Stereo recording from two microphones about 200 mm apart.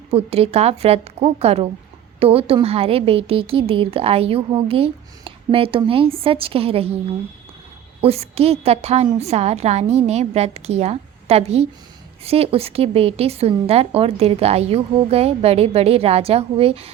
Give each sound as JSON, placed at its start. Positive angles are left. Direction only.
{"t": 0.1, "sound": "a woman's voice", "side_deg": -30}
{"t": 8.0, "sound": "a woman's voice", "side_deg": -30}